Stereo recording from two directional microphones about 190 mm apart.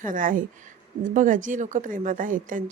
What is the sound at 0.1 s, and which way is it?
A woman's voice, 45° right (ahead or behind).